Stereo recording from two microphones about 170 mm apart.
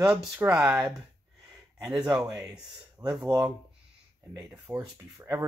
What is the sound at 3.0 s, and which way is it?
Speech, 20° right (ahead or behind).